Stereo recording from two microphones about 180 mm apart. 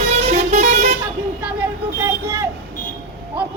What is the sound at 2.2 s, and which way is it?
Vehicle, 15° right (ahead or behind).